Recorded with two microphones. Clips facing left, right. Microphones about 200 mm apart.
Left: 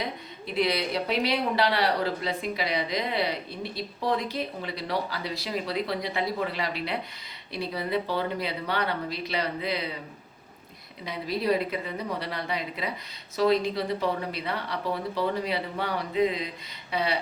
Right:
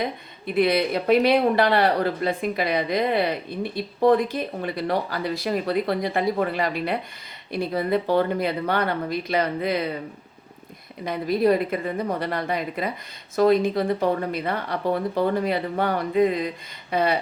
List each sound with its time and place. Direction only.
0.0 s speech: 55° right (ahead or behind)
11.0 s speech: 50° right (ahead or behind)